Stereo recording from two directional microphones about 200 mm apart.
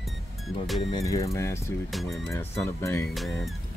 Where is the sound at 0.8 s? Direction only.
20° left (ahead or behind).